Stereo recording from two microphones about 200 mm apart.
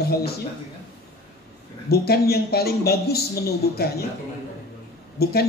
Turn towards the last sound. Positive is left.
turn(degrees=50)  # may be behind; listen again after turning